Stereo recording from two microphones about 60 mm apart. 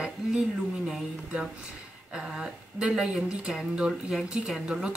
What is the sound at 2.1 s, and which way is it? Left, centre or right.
Speech, centre.